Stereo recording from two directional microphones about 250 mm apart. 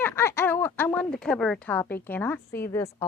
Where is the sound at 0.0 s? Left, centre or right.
Centre.